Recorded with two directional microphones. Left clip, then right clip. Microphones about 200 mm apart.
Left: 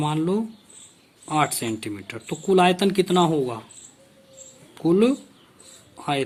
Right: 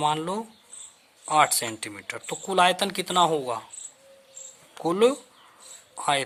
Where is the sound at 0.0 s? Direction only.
35° right (ahead or behind).